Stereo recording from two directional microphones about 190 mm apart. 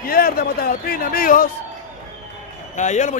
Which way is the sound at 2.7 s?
40° left (ahead or behind).